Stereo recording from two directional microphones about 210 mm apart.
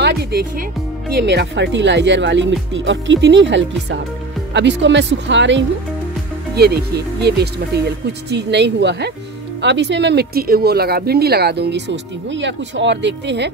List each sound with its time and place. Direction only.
0.0 s speech: 50° right (ahead or behind)